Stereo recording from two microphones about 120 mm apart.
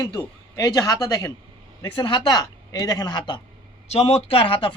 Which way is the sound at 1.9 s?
40° left (ahead or behind).